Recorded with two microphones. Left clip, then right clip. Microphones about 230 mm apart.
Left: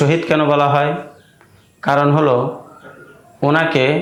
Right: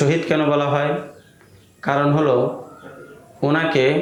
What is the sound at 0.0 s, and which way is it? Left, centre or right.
Speech, left.